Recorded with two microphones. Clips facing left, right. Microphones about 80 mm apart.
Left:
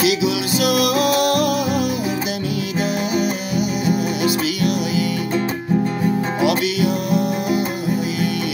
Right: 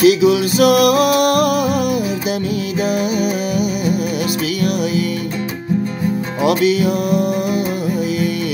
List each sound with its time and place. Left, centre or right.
0.0 s music: right
4.6 s music: right
6.4 s music: right